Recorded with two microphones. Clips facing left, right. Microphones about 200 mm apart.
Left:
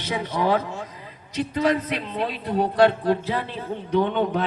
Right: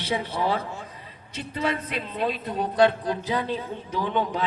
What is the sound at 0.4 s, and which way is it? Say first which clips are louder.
Speech: left 4 dB; 55° left (ahead or behind).